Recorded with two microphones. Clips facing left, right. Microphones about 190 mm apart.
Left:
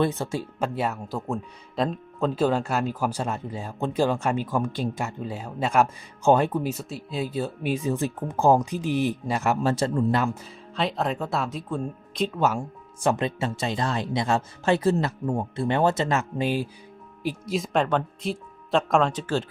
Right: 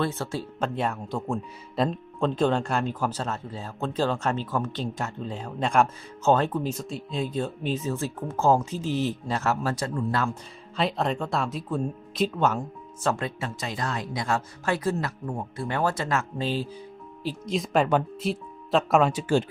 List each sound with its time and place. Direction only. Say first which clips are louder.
0.0 s speech: left 3 dB; 15° left (ahead or behind)
9.7 s speech: left 5 dB; 30° left (ahead or behind)
10.8 s speech: even; centre (ahead or behind)
12.5 s speech: even; 10° left (ahead or behind); by 19.5 s 10° right (ahead or behind)